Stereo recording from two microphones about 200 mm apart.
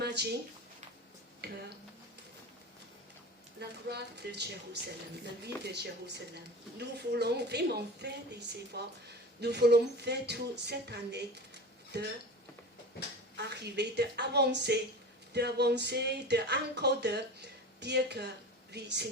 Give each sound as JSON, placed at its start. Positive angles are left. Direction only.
{"t": 0.0, "sound": "a sound", "side_deg": -55}
{"t": 1.4, "sound": "a woman's voice", "side_deg": -55}
{"t": 3.6, "sound": "a woman's voice", "side_deg": -55}
{"t": 13.3, "sound": "a woman's voice", "side_deg": -55}